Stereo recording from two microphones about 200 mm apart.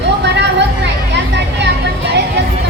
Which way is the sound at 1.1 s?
60° right (ahead or behind).